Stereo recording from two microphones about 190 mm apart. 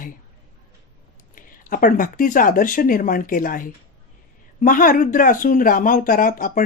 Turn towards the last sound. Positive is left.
turn(degrees=45)  # may be behind; listen again after turning